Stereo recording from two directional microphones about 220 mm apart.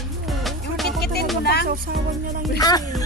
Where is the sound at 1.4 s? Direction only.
45° left (ahead or behind).